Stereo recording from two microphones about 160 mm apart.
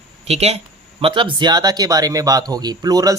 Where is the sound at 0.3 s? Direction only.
40° right (ahead or behind).